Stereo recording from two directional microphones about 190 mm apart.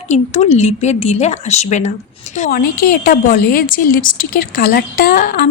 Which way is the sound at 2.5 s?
50° left (ahead or behind).